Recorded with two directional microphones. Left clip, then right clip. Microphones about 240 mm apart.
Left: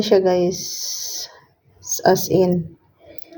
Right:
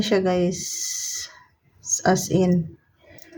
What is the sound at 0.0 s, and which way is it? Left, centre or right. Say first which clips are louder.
Speech: left 5 dB; centre.